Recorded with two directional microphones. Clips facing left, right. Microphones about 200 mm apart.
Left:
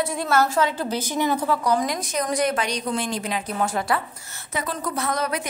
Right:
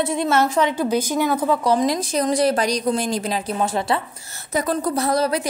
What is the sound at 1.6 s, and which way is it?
A woman's voice, 30° right (ahead or behind).